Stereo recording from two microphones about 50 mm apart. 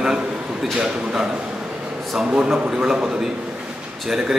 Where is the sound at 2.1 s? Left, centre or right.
Centre.